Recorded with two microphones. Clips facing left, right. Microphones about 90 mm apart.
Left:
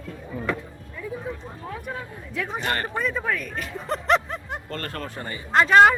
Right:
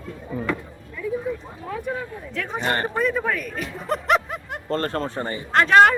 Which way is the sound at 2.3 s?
5° left (ahead or behind).